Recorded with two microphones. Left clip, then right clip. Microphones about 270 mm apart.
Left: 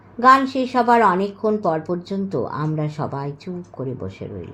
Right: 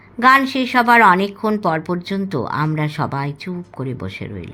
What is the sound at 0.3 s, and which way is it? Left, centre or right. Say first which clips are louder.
Speech: right 1 dB; right.